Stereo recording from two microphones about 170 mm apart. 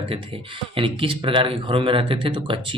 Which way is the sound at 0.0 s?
30° right (ahead or behind).